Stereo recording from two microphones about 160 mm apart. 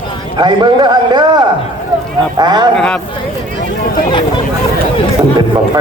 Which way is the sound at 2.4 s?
25° right (ahead or behind).